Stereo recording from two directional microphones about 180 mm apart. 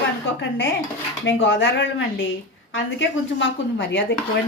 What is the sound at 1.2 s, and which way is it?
A woman's voice, 90° left.